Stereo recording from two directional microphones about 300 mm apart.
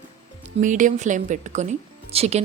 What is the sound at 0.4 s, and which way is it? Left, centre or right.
A woman's voice, right.